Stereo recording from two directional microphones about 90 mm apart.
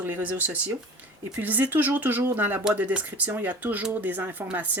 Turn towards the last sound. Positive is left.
turn(degrees=-20)  # may be behind; listen again after turning